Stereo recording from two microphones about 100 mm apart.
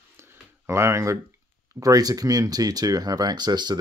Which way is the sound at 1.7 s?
35° right (ahead or behind).